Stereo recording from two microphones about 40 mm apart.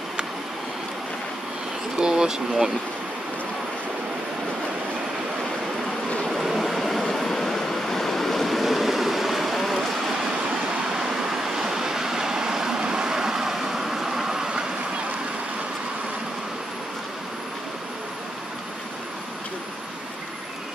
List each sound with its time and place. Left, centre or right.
2.0 s speech: centre
6.2 s vehicle: centre
11.0 s vehicle: centre